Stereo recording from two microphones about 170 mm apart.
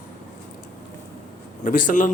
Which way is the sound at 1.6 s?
50° left (ahead or behind).